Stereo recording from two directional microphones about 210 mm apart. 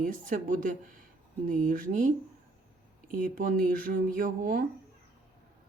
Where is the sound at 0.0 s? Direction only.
40° right (ahead or behind).